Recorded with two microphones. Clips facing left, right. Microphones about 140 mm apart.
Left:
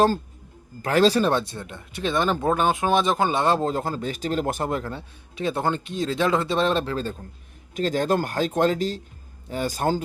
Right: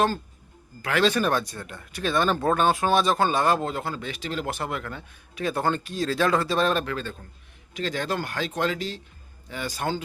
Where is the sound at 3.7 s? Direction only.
40° left (ahead or behind).